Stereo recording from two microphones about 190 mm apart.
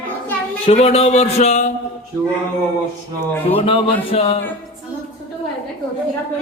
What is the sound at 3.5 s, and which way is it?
Speech, 30° left (ahead or behind).